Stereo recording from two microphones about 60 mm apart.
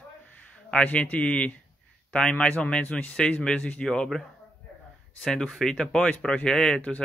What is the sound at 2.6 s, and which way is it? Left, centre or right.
Speech, centre.